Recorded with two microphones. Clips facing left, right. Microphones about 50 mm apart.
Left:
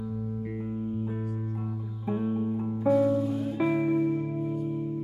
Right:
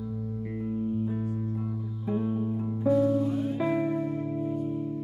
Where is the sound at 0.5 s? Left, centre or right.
Centre.